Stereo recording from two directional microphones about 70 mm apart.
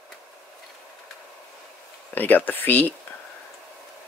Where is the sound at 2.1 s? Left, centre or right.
Left.